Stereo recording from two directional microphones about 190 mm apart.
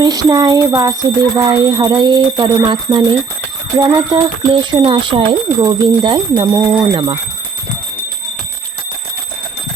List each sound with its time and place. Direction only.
0.0 s speech: 20° right (ahead or behind)